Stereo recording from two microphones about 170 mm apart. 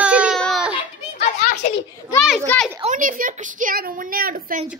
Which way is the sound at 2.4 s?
5° left (ahead or behind).